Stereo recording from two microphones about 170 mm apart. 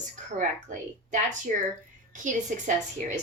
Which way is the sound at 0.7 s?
45° right (ahead or behind).